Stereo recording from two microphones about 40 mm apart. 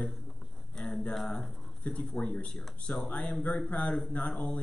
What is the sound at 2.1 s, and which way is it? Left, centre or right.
Speech, left.